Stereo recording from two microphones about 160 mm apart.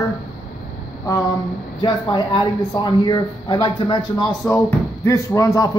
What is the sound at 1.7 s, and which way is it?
Speech, 30° left (ahead or behind).